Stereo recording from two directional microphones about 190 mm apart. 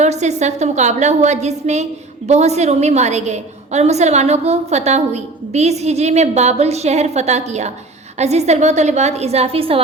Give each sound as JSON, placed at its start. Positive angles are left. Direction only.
{"t": 0.0, "sound": "a woman's voice", "side_deg": -35}